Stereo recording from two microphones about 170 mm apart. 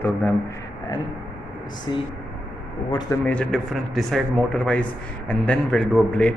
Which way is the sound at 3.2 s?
5° left (ahead or behind).